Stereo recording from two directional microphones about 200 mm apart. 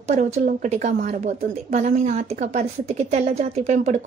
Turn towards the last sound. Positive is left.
turn(degrees=-35)  # may be behind; listen again after turning